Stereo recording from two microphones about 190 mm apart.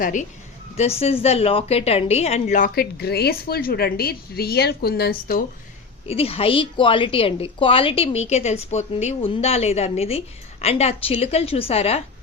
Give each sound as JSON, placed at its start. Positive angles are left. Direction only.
{"t": 0.0, "sound": "a woman's voice", "side_deg": 40}
{"t": 6.1, "sound": "a woman's voice", "side_deg": 30}